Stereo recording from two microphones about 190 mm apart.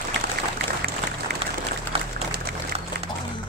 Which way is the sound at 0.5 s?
55° right (ahead or behind).